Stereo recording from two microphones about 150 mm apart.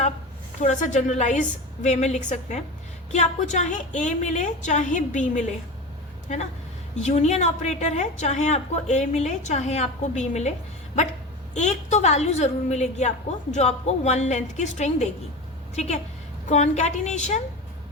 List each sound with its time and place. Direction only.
0.6 s a woman's voice: 50° left (ahead or behind)
6.9 s a woman's voice: 50° left (ahead or behind)
11.5 s a woman's voice: 50° left (ahead or behind)